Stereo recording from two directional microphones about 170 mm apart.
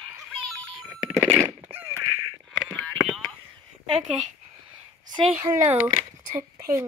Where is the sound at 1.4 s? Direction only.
15° right (ahead or behind).